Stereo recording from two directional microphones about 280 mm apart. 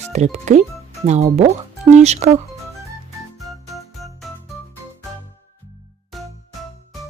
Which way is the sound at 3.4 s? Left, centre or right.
Centre.